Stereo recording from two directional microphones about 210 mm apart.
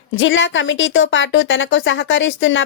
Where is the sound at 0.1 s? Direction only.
65° left (ahead or behind).